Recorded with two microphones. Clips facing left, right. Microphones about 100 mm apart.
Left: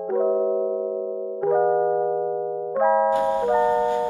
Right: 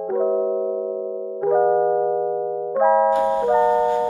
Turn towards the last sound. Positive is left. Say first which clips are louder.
# right 3 dB
turn(degrees=-20)  # may be behind; listen again after turning